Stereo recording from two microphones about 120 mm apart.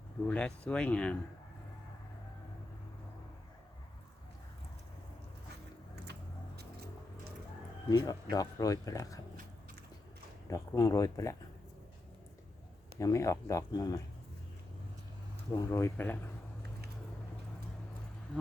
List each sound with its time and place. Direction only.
0.3 s speech: 10° left (ahead or behind)
7.9 s speech: 30° left (ahead or behind)
10.5 s speech: 25° left (ahead or behind)
13.0 s speech: 25° left (ahead or behind)
15.5 s speech: 25° left (ahead or behind)